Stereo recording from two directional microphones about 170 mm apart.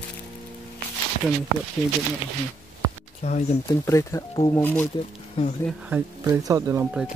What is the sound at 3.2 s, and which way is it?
Speech, 40° left (ahead or behind).